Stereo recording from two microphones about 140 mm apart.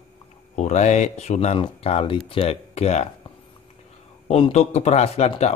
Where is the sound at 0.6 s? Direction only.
55° left (ahead or behind).